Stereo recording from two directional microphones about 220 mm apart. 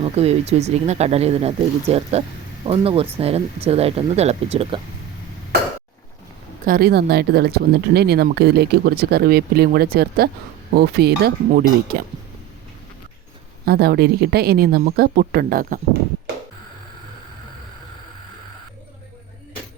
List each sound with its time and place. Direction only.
0.0 s speech: 30° right (ahead or behind)
6.7 s speech: 45° right (ahead or behind)
13.7 s speech: 45° right (ahead or behind)